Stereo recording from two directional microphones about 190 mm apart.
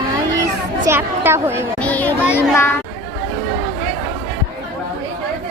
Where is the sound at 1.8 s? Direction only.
5° left (ahead or behind).